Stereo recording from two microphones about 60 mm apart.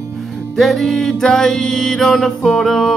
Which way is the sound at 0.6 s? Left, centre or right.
Centre.